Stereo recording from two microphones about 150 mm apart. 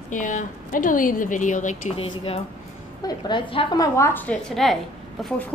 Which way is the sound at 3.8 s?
20° left (ahead or behind).